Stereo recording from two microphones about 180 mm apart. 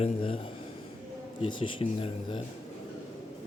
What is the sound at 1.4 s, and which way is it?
Speech, 30° left (ahead or behind).